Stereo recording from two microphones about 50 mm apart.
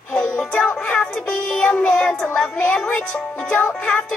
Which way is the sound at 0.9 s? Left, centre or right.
Left.